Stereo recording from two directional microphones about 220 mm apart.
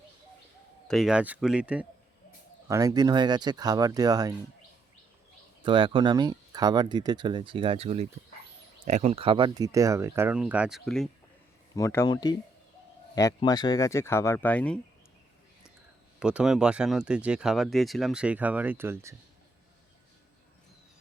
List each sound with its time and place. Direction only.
0.9 s speech: centre (ahead or behind)
2.6 s speech: 15° right (ahead or behind)
5.6 s speech: 20° right (ahead or behind); by 11.1 s centre (ahead or behind)
11.7 s speech: 15° left (ahead or behind)
16.2 s speech: 5° right (ahead or behind)